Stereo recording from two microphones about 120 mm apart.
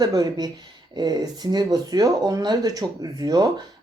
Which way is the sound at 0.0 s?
30° right (ahead or behind).